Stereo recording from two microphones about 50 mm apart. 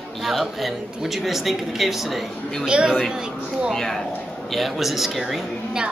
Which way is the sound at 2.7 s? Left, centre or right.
Centre.